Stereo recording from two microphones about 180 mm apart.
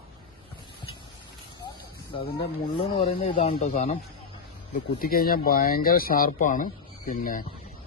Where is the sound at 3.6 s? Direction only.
40° left (ahead or behind).